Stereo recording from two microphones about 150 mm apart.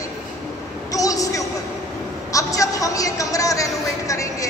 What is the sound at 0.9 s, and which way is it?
A woman's voice, 25° left (ahead or behind).